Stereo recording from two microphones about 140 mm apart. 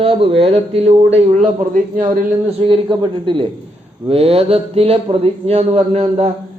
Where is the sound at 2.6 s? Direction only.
35° right (ahead or behind).